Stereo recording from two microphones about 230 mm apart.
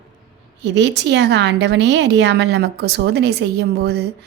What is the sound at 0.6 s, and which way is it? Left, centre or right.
A woman's voice, right.